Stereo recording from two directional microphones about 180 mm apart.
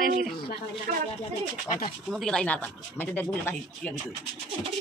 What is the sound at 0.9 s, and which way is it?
Speech, 50° right (ahead or behind).